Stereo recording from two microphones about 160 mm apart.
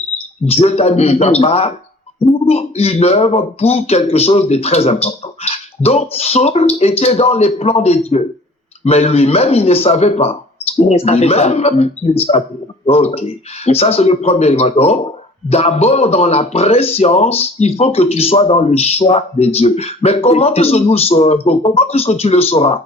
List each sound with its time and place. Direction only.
0.4 s speech: 40° left (ahead or behind)